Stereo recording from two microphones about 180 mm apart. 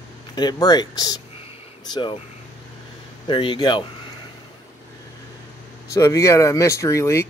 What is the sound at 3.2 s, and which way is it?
Speech, 25° left (ahead or behind).